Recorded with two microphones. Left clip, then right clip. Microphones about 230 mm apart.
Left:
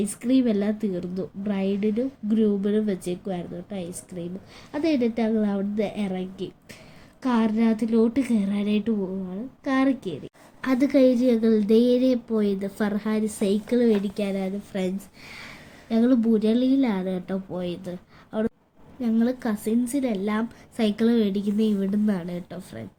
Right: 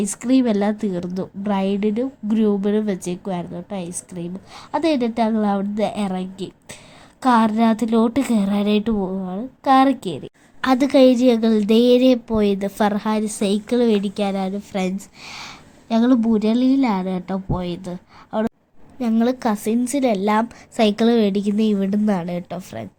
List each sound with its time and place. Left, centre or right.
0.0 s a woman's voice: right